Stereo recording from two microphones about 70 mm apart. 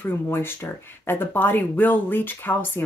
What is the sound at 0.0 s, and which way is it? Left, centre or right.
Speech, left.